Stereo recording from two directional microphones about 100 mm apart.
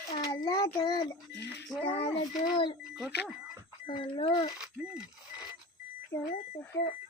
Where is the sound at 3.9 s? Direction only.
60° left (ahead or behind).